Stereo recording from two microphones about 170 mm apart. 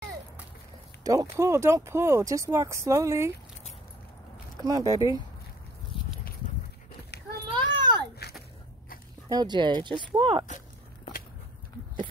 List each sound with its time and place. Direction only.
1.0 s speech: 20° right (ahead or behind)
4.6 s speech: 20° right (ahead or behind)
7.5 s a sound: 25° right (ahead or behind)
9.3 s speech: 25° right (ahead or behind)